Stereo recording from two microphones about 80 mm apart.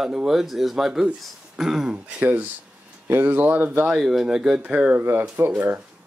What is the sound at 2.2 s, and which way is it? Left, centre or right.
Speech, right.